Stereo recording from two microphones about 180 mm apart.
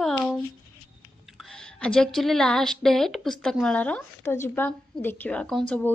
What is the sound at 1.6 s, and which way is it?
A woman's voice, 5° left (ahead or behind).